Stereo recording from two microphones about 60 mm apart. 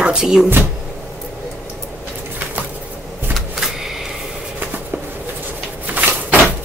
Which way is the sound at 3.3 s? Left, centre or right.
Centre.